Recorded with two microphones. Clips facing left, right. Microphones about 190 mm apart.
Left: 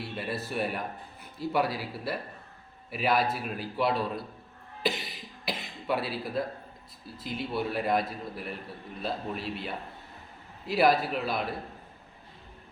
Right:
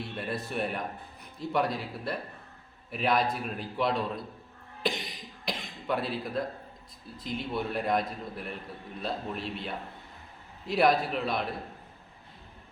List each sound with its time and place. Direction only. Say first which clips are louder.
0.0 s a man's voice: even; 5° left (ahead or behind)
4.8 s cough: left 1 dB; 5° left (ahead or behind)
7.2 s a man's voice: left 1 dB; 5° left (ahead or behind)